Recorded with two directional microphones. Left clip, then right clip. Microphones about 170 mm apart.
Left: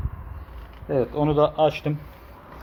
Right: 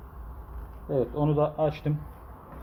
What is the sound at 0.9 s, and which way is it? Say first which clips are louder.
Speech: left 5 dB; 40° left (ahead or behind).